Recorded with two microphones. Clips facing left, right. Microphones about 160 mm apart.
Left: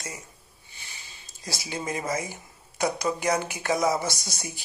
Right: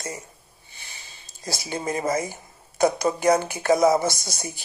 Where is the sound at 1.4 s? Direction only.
45° right (ahead or behind).